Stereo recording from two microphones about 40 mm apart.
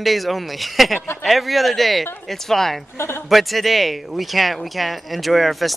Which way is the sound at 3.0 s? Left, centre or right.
Left.